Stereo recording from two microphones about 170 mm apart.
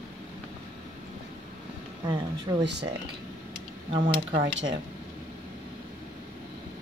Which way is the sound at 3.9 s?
30° right (ahead or behind).